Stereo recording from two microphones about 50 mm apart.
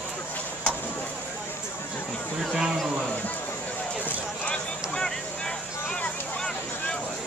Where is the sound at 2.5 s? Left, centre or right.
Centre.